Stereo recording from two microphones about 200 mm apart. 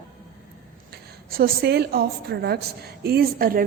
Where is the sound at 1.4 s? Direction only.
55° right (ahead or behind).